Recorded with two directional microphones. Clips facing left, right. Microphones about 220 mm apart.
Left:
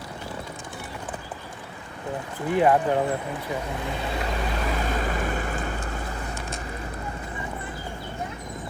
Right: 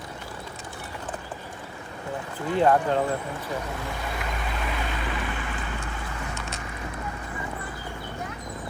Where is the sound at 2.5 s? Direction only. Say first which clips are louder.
Left 1 dB; 15° left (ahead or behind).